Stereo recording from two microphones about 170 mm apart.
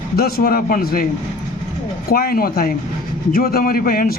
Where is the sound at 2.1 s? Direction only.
60° left (ahead or behind).